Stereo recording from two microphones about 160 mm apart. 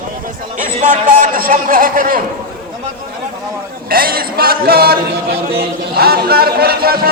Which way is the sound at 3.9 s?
65° right (ahead or behind).